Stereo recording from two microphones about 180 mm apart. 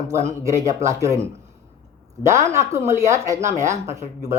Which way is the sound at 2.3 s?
15° right (ahead or behind).